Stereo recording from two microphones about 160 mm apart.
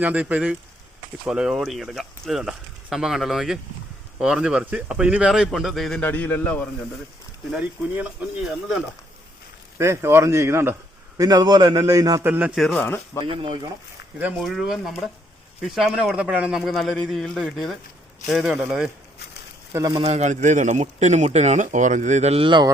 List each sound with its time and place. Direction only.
0.0 s a man's voice: 10° right (ahead or behind); by 6.7 s 10° left (ahead or behind)
9.7 s a man's voice: 15° right (ahead or behind)
12.3 s a man's voice: 10° right (ahead or behind)
12.5 s speech: centre (ahead or behind)
13.2 s speech: 35° right (ahead or behind)
14.2 s speech: 5° right (ahead or behind)
19.7 s a man's voice: 25° right (ahead or behind)